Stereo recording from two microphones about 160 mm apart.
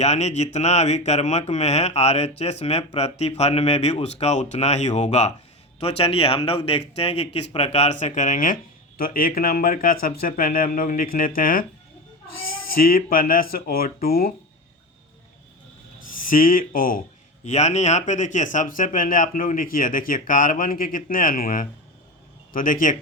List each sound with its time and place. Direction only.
0.0 s speech: 45° left (ahead or behind); by 11.6 s 60° left (ahead or behind)
12.7 s speech: 65° left (ahead or behind)
16.1 s speech: 60° left (ahead or behind)
17.4 s speech: 45° left (ahead or behind)